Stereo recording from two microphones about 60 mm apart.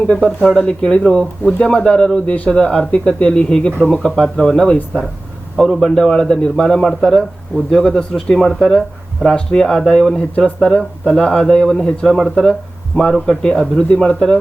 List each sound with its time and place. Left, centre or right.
0.1 s speech: centre
4.1 s speech: centre